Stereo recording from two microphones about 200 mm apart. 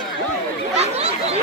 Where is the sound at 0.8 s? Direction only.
30° right (ahead or behind).